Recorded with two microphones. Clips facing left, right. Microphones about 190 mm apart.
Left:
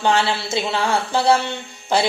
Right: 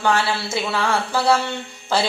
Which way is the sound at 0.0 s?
25° left (ahead or behind).